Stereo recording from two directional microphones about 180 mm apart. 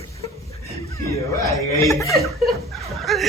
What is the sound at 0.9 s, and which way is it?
Speech, 15° left (ahead or behind).